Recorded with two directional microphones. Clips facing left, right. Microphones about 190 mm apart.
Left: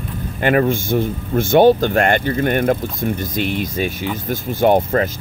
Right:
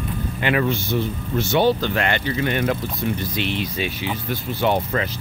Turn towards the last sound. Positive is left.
turn(degrees=45)  # may be behind; listen again after turning